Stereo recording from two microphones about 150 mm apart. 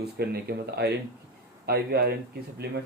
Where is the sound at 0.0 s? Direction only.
90° right.